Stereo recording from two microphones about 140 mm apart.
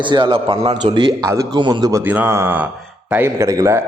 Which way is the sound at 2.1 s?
15° right (ahead or behind).